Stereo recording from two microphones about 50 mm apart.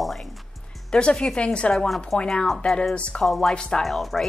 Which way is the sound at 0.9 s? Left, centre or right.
Centre.